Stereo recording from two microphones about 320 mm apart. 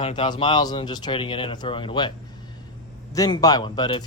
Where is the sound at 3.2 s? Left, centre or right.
Centre.